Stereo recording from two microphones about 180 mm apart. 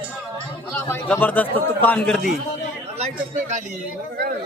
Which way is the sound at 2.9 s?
40° right (ahead or behind).